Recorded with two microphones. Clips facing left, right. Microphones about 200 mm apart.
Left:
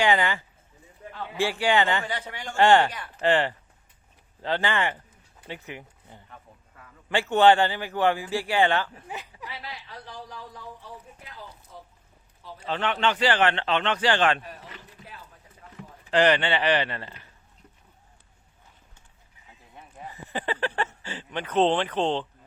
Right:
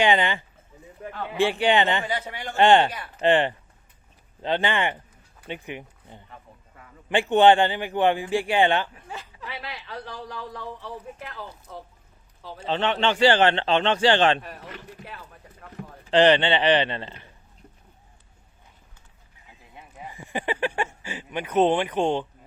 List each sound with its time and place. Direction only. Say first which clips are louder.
0.0 s a man's voice: right 2 dB; 20° right (ahead or behind)
1.0 s a sound: right 4 dB; 70° right (ahead or behind)
1.4 s a man's voice: right 3 dB; 20° right (ahead or behind)
9.0 s a sound: even; 15° left (ahead or behind)
9.5 s speech: right 6 dB; 70° right (ahead or behind)
12.5 s a man's voice: right 3 dB; 25° right (ahead or behind)
14.7 s a sound: right 6 dB; 65° right (ahead or behind)
16.0 s a man's voice: right 4 dB; 25° right (ahead or behind)
19.7 s speech: right 1 dB; 10° right (ahead or behind)